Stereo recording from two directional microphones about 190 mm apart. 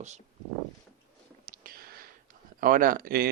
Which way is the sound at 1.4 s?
50° right (ahead or behind).